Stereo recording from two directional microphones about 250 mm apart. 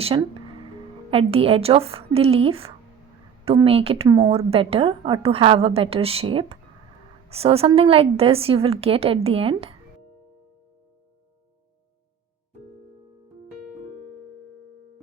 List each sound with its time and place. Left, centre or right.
0.0 s a woman's voice: right